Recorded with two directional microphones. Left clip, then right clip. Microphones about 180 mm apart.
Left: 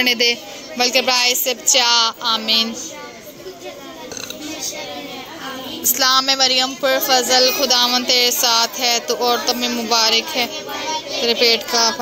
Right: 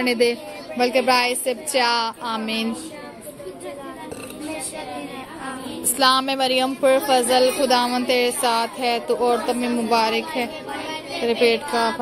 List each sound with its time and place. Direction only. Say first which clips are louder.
0.0 s speech: left 3 dB; 20° right (ahead or behind)
5.9 s speech: left 3 dB; 25° right (ahead or behind)